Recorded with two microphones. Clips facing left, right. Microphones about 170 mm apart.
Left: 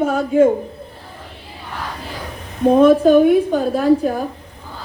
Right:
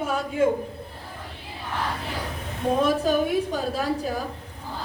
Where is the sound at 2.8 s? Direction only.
55° left (ahead or behind).